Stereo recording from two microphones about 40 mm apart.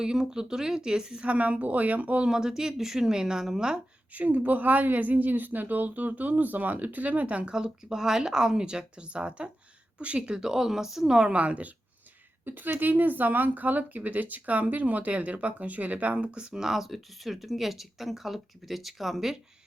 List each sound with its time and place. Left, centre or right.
0.0 s speech: centre
1.2 s a woman's voice: right
2.2 s speech: centre
4.1 s speech: right
7.5 s speech: centre
11.3 s a woman's voice: right
12.5 s speech: right
16.6 s speech: centre